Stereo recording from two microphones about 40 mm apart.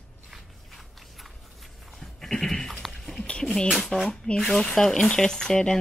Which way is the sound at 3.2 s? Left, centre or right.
Left.